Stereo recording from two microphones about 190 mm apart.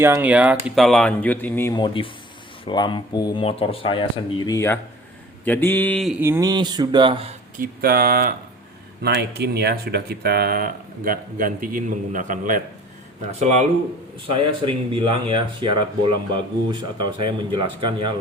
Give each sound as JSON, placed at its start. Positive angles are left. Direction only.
{"t": 0.0, "sound": "speech", "side_deg": -10}
{"t": 1.7, "sound": "speech", "side_deg": 25}
{"t": 6.1, "sound": "speech", "side_deg": -10}
{"t": 7.6, "sound": "speech", "side_deg": -50}